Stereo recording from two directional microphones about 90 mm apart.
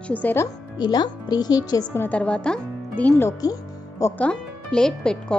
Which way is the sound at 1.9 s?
25° left (ahead or behind).